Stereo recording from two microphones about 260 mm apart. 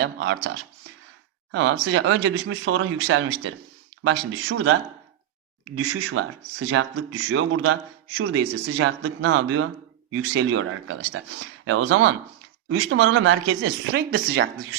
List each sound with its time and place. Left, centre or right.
0.0 s speech: right
1.5 s a man's voice: right